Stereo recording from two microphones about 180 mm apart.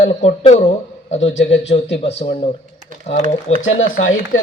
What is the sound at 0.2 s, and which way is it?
Speech, 35° left (ahead or behind).